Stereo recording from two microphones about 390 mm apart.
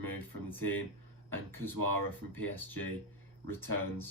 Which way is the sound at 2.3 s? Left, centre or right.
Centre.